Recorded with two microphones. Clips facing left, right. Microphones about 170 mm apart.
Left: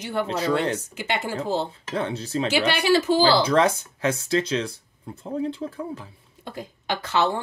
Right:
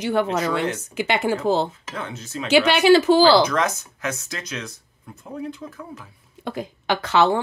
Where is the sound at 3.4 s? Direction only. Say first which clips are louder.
Left 3 dB; 30° left (ahead or behind).